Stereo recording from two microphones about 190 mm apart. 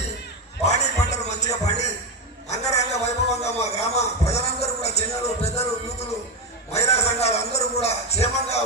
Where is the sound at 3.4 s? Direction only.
35° left (ahead or behind).